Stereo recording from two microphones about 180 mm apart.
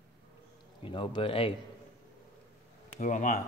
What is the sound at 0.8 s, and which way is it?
Speech, 30° left (ahead or behind).